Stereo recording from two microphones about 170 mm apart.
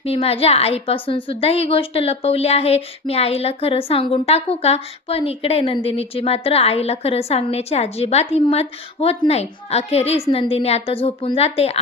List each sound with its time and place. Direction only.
0.0 s a woman's voice: 35° left (ahead or behind)